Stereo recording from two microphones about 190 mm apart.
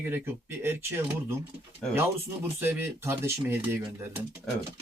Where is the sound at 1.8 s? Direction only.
5° left (ahead or behind).